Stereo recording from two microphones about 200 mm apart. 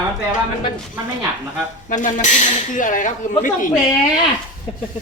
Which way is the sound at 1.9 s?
40° left (ahead or behind).